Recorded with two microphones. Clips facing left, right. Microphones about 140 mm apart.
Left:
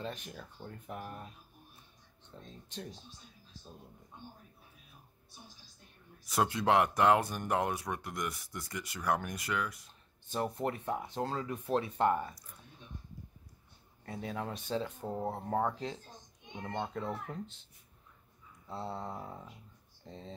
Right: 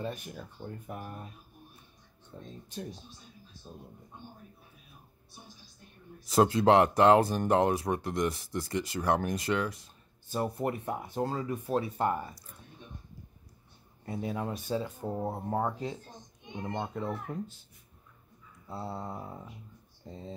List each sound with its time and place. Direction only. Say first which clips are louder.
0.0 s speech: right 4 dB; 10° right (ahead or behind)
2.3 s speech: right 4 dB; 10° right (ahead or behind)
6.2 s speech: right 7 dB; 30° right (ahead or behind)
10.2 s speech: right 3 dB; 5° right (ahead or behind)
14.0 s speech: right 4 dB; 10° right (ahead or behind)
18.7 s speech: right 1 dB; 10° right (ahead or behind)